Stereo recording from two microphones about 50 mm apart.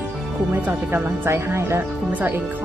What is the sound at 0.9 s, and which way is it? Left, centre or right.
Speech, right.